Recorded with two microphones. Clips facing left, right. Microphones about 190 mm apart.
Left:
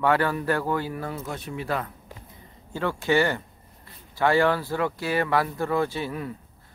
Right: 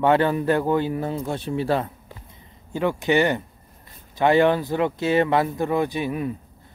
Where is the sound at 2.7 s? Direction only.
20° right (ahead or behind).